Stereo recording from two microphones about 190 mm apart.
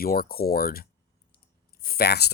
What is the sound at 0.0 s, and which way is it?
Speech, 50° left (ahead or behind).